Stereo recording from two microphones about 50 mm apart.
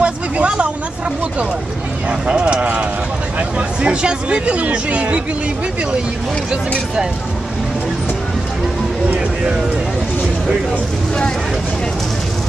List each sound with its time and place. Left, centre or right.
0.0 s vehicle: right
2.0 s a sound: centre
3.3 s speech: right
9.1 s vehicle: right